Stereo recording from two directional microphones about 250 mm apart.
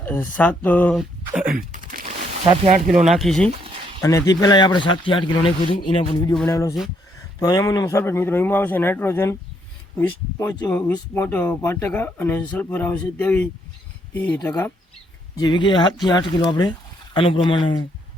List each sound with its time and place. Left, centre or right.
0.3 s speech: centre
1.5 s typing: right
2.5 s speech: right
2.9 s speech: centre
4.0 s speech: centre
15.4 s speech: centre